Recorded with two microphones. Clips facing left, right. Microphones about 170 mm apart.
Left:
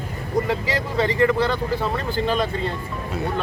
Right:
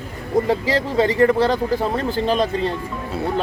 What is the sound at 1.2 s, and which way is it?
Speech, 40° right (ahead or behind).